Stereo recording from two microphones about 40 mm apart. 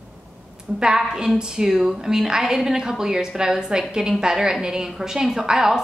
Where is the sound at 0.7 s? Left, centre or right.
Centre.